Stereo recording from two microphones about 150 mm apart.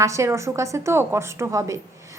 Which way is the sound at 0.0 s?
20° right (ahead or behind).